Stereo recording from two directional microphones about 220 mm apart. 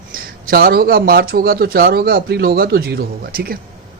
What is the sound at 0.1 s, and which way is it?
A man's voice, 40° right (ahead or behind).